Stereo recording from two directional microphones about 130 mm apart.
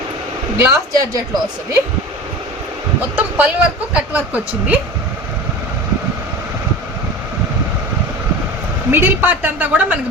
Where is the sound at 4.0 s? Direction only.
10° right (ahead or behind).